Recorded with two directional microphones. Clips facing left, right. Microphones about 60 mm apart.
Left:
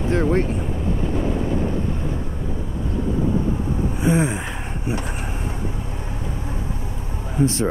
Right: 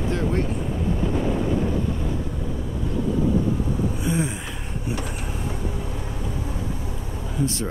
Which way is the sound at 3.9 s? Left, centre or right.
Left.